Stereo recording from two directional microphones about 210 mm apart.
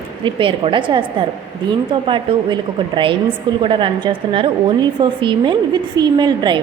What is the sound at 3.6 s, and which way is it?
A woman's voice, 25° right (ahead or behind).